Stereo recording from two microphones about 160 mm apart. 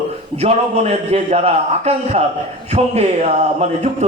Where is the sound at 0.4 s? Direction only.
40° right (ahead or behind).